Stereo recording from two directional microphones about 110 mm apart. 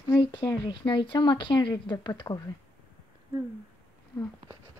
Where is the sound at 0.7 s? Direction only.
50° left (ahead or behind).